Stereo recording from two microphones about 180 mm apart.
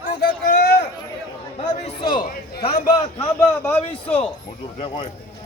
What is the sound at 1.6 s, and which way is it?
Speech, 30° left (ahead or behind).